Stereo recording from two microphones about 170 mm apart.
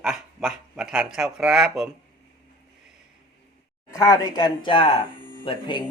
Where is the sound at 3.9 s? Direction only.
20° left (ahead or behind).